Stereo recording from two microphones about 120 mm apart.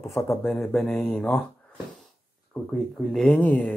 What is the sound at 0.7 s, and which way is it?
Speech, 10° left (ahead or behind).